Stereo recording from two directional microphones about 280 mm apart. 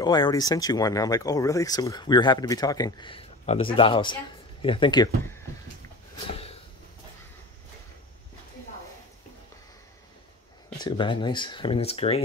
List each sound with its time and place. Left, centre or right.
0.0 s speech: centre
10.8 s speech: centre